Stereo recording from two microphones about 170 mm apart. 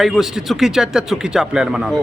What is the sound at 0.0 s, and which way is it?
A man's voice, centre (ahead or behind).